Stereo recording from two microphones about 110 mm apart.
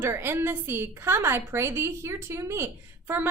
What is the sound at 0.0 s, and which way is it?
A woman's voice, 20° right (ahead or behind).